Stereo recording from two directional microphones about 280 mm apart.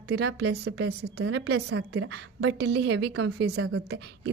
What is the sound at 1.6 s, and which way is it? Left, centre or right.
A woman's voice, right.